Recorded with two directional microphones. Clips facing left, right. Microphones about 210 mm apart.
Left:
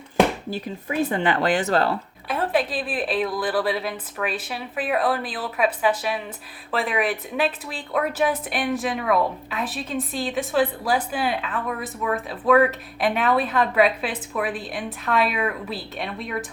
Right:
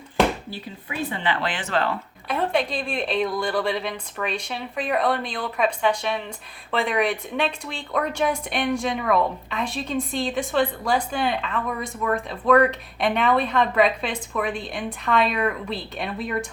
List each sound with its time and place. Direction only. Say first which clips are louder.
0.5 s speech: left 7 dB; 45° left (ahead or behind)
2.2 s a woman's voice: even; centre (ahead or behind)